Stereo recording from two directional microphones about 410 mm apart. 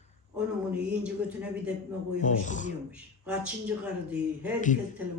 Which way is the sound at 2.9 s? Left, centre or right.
Centre.